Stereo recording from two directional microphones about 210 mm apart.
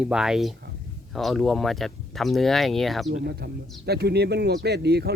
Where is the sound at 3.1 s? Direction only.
50° right (ahead or behind).